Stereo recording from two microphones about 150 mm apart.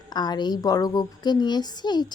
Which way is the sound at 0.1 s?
25° left (ahead or behind).